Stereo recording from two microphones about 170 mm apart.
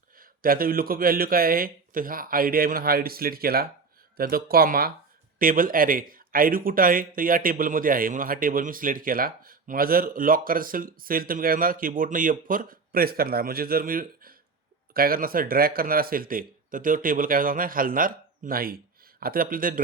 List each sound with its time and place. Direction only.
0.2 s a man's voice: 60° right (ahead or behind)